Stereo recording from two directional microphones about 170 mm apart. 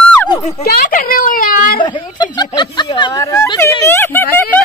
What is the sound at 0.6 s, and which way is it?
A child's voice, 60° left (ahead or behind).